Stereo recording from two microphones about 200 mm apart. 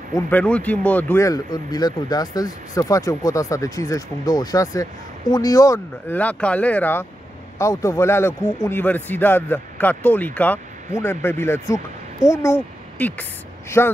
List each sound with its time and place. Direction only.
0.1 s speech: 10° left (ahead or behind)